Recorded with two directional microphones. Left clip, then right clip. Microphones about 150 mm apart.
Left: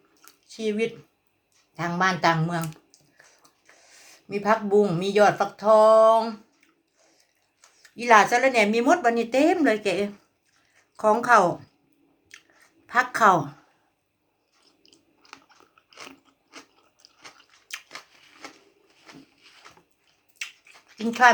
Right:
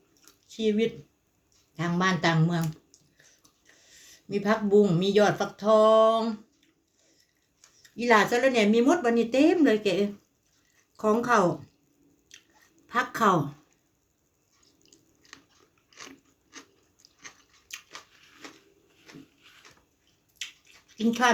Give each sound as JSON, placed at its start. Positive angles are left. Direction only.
{"t": 0.6, "sound": "speech", "side_deg": -20}
{"t": 2.0, "sound": "speech", "side_deg": -20}
{"t": 3.4, "sound": "speech", "side_deg": -20}
{"t": 7.8, "sound": "speech", "side_deg": -20}
{"t": 12.9, "sound": "speech", "side_deg": -20}
{"t": 14.6, "sound": "a sound", "side_deg": -20}
{"t": 15.9, "sound": "biting", "side_deg": -25}
{"t": 20.4, "sound": "a sound", "side_deg": -20}